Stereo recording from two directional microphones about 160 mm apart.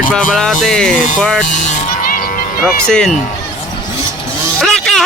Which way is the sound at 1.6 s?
55° left (ahead or behind).